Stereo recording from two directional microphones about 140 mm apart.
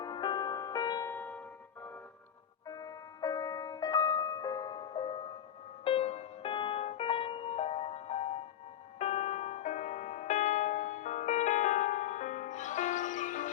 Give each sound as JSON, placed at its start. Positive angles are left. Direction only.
{"t": 0.0, "sound": "music", "side_deg": 30}
{"t": 1.1, "sound": "music", "side_deg": 15}
{"t": 2.6, "sound": "music", "side_deg": 25}
{"t": 5.8, "sound": "music", "side_deg": 45}